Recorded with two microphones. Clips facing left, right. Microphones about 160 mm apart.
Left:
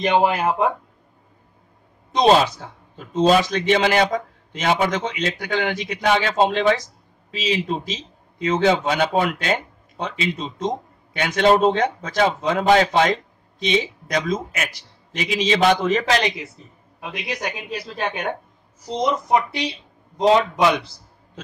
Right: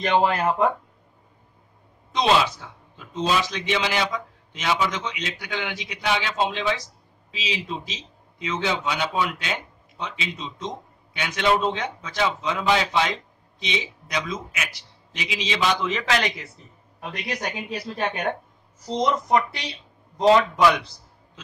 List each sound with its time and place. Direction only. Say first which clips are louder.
0.0 s speech: left 2 dB; 15° left (ahead or behind)
2.1 s speech: left 5 dB; 40° left (ahead or behind)
16.2 s a man's voice: left 3 dB; 20° left (ahead or behind)
17.0 s a man's voice: left 2 dB; 5° left (ahead or behind); by 20.8 s 20° left (ahead or behind)